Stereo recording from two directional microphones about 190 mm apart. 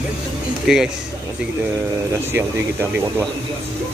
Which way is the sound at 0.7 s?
Centre (ahead or behind).